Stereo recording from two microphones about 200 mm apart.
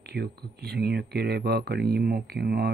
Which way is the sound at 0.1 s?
55° right (ahead or behind).